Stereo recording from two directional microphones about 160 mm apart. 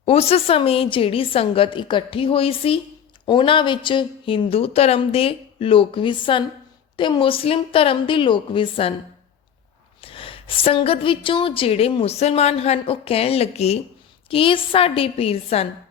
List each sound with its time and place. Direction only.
0.0 s a woman's voice: 40° left (ahead or behind)
10.0 s a woman's voice: 35° left (ahead or behind)